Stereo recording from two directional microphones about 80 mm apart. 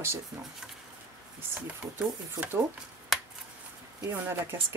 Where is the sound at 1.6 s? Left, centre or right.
Centre.